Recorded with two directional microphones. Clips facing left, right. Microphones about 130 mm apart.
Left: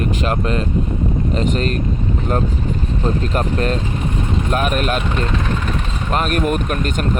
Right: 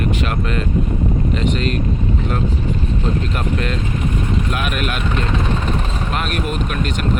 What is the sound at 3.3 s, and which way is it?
Speech, 40° left (ahead or behind).